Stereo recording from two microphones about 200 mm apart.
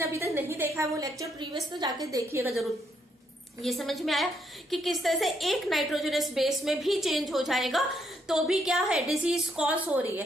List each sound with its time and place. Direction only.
0.0 s a sound: 10° right (ahead or behind)
1.8 s a woman's voice: 15° right (ahead or behind)
3.6 s a woman's voice: centre (ahead or behind)